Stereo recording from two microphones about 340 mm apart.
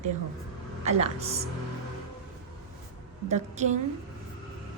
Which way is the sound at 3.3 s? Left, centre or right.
Centre.